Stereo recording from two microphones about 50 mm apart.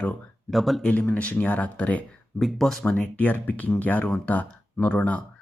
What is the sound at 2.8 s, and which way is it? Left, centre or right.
Speech, left.